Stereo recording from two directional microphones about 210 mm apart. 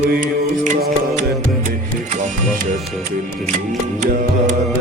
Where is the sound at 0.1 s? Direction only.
40° right (ahead or behind).